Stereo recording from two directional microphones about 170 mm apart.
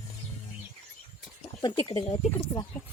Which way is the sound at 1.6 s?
25° left (ahead or behind).